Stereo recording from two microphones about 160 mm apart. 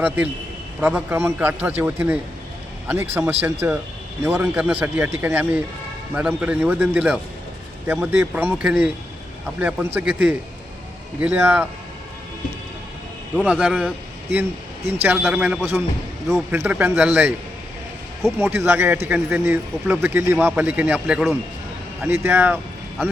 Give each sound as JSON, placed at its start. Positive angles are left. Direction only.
{"t": 0.8, "sound": "speech", "side_deg": -10}
{"t": 13.5, "sound": "speech", "side_deg": -5}